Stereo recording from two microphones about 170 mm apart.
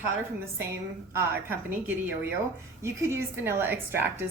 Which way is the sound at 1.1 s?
15° right (ahead or behind).